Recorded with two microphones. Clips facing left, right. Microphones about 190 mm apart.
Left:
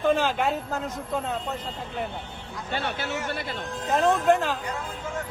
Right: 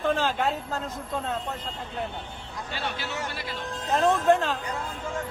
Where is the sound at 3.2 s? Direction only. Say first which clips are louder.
Left 3 dB; 55° left (ahead or behind).